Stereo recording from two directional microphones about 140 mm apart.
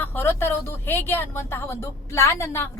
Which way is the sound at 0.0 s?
15° left (ahead or behind).